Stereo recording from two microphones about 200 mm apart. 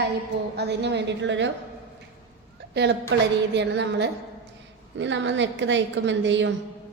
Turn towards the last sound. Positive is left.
turn(degrees=-65)  # may be behind; listen again after turning